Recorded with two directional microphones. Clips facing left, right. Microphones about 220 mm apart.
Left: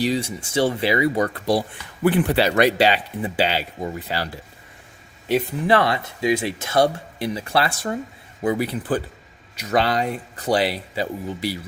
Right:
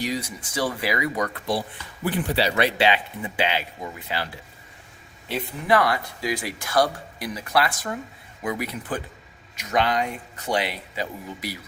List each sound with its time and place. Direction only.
0.0 s speech: 30° left (ahead or behind)
2.0 s speech: 65° left (ahead or behind); by 4.3 s 40° left (ahead or behind)
5.6 s speech: 25° left (ahead or behind)